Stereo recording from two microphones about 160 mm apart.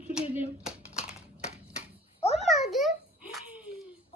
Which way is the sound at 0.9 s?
5° right (ahead or behind).